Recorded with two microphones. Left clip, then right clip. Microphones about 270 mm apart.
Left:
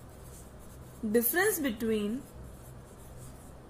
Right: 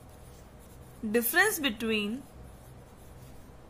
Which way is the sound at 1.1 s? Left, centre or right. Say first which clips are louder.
Even; right.